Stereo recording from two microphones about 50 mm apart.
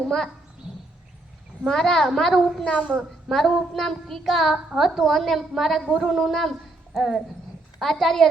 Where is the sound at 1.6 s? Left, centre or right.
Centre.